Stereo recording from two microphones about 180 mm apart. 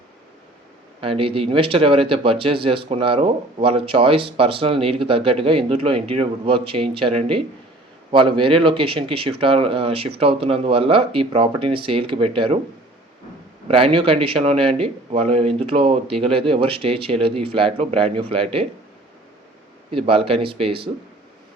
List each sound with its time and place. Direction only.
1.0 s speech: 30° right (ahead or behind)
13.7 s speech: 30° right (ahead or behind)
19.9 s speech: 30° right (ahead or behind)